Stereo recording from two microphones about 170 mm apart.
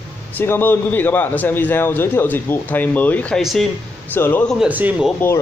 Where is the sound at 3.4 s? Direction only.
Centre (ahead or behind).